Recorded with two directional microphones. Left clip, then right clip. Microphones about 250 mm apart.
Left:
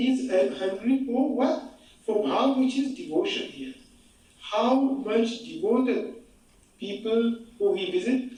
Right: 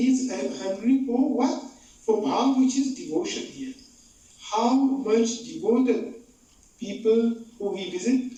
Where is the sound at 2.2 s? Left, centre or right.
Right.